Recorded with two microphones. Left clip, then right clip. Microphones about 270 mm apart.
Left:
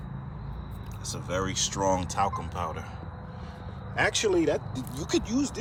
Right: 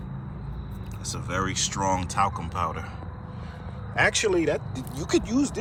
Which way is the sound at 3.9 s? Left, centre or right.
Centre.